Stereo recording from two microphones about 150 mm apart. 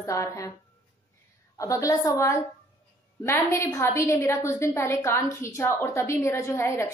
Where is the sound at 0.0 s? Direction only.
20° left (ahead or behind).